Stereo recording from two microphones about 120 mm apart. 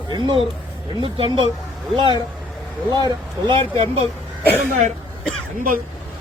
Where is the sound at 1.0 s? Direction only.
45° right (ahead or behind).